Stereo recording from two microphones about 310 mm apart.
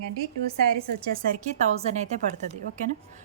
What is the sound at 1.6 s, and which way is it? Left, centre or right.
Speech, right.